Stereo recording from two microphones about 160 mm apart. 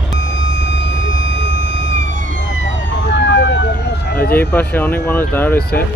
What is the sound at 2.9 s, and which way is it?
Emergency vehicle, 90° left.